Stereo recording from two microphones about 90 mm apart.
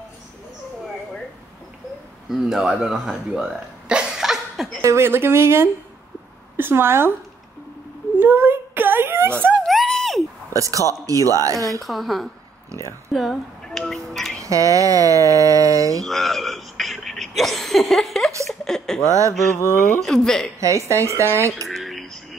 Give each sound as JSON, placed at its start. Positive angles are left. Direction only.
{"t": 2.2, "sound": "speech", "side_deg": -5}
{"t": 4.8, "sound": "speech", "side_deg": -30}
{"t": 8.2, "sound": "a sound", "side_deg": -25}
{"t": 9.7, "sound": "a sound", "side_deg": 0}
{"t": 10.5, "sound": "speech", "side_deg": -40}
{"t": 11.8, "sound": "speech", "side_deg": 0}
{"t": 14.4, "sound": "speech", "side_deg": -40}
{"t": 16.0, "sound": "a sound", "side_deg": 0}
{"t": 19.0, "sound": "speech", "side_deg": -35}
{"t": 19.5, "sound": "speech", "side_deg": 30}
{"t": 20.0, "sound": "speech", "side_deg": 5}
{"t": 20.6, "sound": "speech", "side_deg": -35}
{"t": 21.6, "sound": "a sound", "side_deg": 0}